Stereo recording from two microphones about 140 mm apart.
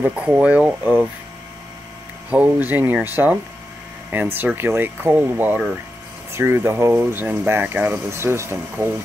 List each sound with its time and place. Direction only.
0.0 s speech: 10° right (ahead or behind)
2.2 s speech: 10° right (ahead or behind)